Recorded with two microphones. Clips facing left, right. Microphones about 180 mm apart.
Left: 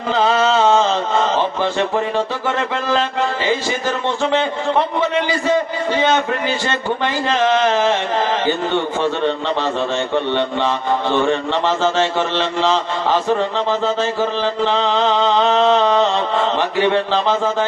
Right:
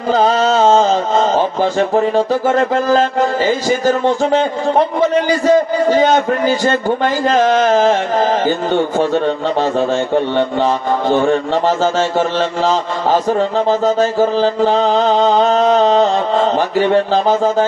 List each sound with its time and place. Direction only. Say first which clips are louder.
0.1 s speech: right 3 dB; 40° right (ahead or behind)